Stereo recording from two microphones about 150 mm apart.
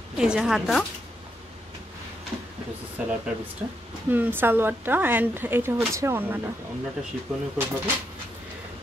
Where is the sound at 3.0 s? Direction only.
10° right (ahead or behind).